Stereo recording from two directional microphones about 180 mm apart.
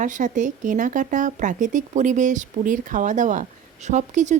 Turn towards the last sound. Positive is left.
turn(degrees=-40)  # may be behind; listen again after turning